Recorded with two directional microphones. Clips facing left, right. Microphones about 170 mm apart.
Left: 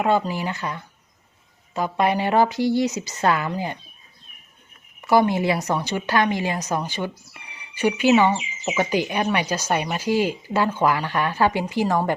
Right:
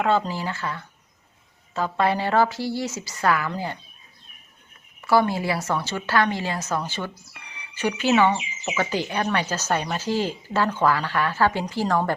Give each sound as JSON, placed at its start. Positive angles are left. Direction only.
{"t": 0.0, "sound": "a woman's voice", "side_deg": 15}
{"t": 4.9, "sound": "a woman's voice", "side_deg": 20}